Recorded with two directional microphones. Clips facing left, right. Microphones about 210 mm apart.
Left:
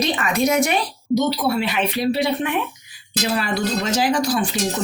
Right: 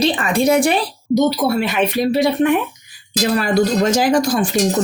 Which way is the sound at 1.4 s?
45° right (ahead or behind).